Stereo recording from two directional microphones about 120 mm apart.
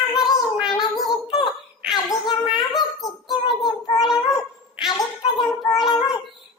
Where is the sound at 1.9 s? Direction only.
40° left (ahead or behind).